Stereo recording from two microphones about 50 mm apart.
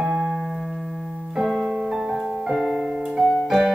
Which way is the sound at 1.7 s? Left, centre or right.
Centre.